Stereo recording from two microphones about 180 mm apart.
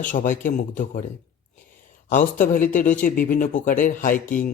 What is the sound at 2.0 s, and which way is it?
Speech, 50° left (ahead or behind).